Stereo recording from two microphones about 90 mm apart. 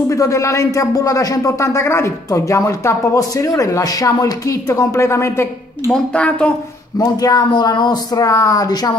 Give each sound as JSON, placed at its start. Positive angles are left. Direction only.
{"t": 0.1, "sound": "speech", "side_deg": 35}
{"t": 5.9, "sound": "speech", "side_deg": 10}
{"t": 7.0, "sound": "speech", "side_deg": 45}
{"t": 7.4, "sound": "speech", "side_deg": 55}